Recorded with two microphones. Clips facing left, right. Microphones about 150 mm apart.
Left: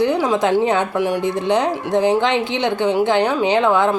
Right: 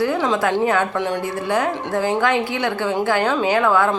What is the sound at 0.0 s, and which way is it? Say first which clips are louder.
A woman's voice: left 2 dB; 15° left (ahead or behind).